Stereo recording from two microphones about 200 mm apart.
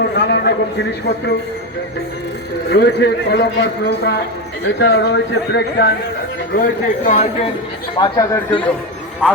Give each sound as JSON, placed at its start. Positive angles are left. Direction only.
{"t": 0.2, "sound": "a man's voice", "side_deg": 60}
{"t": 2.6, "sound": "a man's voice", "side_deg": 55}
{"t": 6.5, "sound": "speech", "side_deg": 45}
{"t": 7.2, "sound": "speech", "side_deg": 30}